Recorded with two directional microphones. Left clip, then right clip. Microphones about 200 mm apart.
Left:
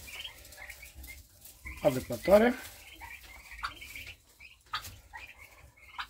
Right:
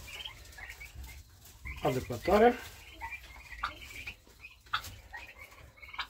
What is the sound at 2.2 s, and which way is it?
Speech, 30° left (ahead or behind).